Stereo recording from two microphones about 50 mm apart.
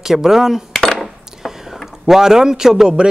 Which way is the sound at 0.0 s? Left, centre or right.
Centre.